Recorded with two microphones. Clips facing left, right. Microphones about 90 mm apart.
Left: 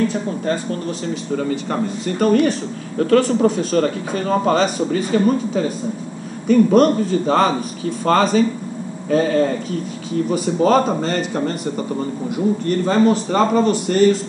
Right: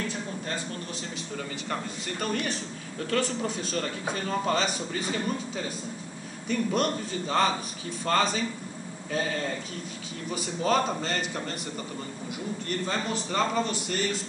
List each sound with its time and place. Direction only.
0.1 s a sound: 50° left (ahead or behind)
1.3 s a man's voice: 45° left (ahead or behind)
12.6 s a man's voice: 50° left (ahead or behind)